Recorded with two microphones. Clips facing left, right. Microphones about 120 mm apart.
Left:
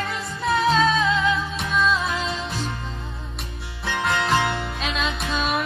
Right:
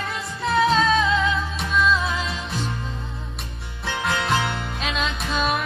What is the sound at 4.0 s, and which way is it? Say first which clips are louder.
Music: left 2 dB; centre (ahead or behind).